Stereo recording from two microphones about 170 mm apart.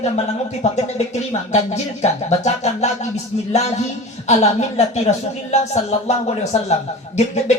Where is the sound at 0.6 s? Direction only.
40° left (ahead or behind).